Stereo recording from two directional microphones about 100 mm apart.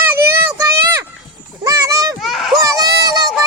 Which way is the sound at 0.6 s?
25° right (ahead or behind).